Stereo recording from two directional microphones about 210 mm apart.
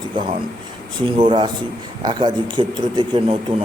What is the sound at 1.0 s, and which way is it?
Speech, 25° right (ahead or behind).